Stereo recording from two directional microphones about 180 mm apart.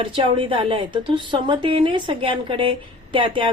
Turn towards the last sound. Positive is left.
turn(degrees=-30)  # may be behind; listen again after turning